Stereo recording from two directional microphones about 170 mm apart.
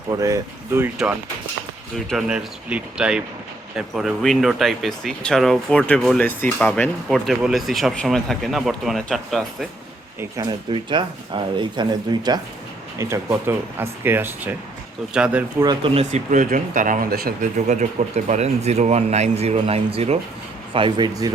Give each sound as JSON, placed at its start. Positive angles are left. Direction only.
{"t": 0.1, "sound": "speech", "side_deg": -20}
{"t": 2.0, "sound": "speech", "side_deg": -5}
{"t": 7.1, "sound": "speech", "side_deg": 0}
{"t": 10.2, "sound": "speech", "side_deg": -20}
{"t": 10.7, "sound": "speech", "side_deg": -30}
{"t": 15.6, "sound": "speech", "side_deg": -25}
{"t": 16.0, "sound": "speech", "side_deg": -45}
{"t": 17.7, "sound": "speech", "side_deg": -45}